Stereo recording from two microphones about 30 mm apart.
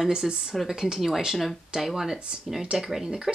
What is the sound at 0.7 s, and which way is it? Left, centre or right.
Speech, centre.